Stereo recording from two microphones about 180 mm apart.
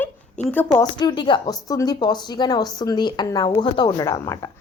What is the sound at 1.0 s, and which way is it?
A woman's voice, 25° left (ahead or behind).